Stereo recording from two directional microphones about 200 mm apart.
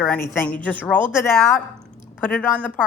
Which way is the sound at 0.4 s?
5° left (ahead or behind).